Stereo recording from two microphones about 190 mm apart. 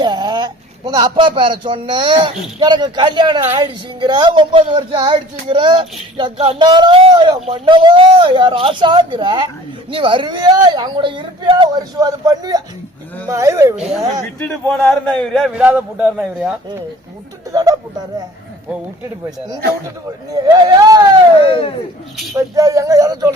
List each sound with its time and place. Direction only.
0.0 s speech: 25° right (ahead or behind)
13.7 s a man's voice: 5° left (ahead or behind)
17.5 s speech: 20° right (ahead or behind)
20.3 s speech: 20° right (ahead or behind)
21.4 s speech: 30° left (ahead or behind)
22.5 s speech: 15° right (ahead or behind)